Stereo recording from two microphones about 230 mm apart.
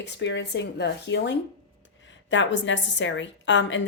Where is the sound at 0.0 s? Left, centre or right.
Left.